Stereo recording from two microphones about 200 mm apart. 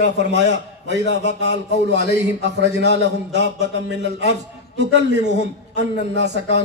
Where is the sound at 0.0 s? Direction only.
60° right (ahead or behind).